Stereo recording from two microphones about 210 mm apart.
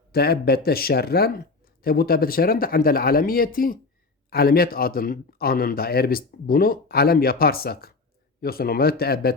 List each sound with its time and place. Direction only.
0.1 s speech: 50° left (ahead or behind)